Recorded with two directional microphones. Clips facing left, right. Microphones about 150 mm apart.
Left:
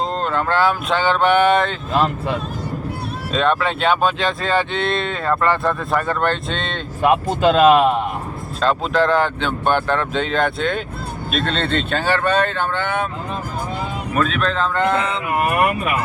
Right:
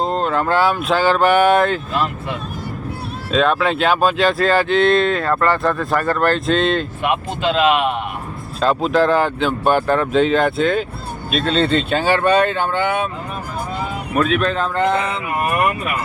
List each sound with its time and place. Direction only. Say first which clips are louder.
0.0 s speech: right 2 dB; 5° right (ahead or behind)
1.9 s speech: left 3 dB; 35° left (ahead or behind)
3.3 s speech: right 3 dB; centre (ahead or behind)
7.0 s speech: left 4 dB; 40° left (ahead or behind)
8.6 s speech: right 2 dB; 5° right (ahead or behind)
14.2 s speech: right 2 dB; 10° right (ahead or behind)